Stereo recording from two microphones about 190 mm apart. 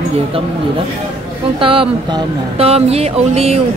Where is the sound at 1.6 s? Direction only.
30° right (ahead or behind).